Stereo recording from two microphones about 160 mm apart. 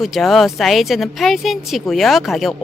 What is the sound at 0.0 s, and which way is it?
Speech, centre (ahead or behind).